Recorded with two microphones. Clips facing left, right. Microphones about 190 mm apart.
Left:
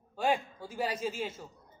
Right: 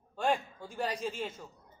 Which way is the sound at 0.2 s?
5° left (ahead or behind).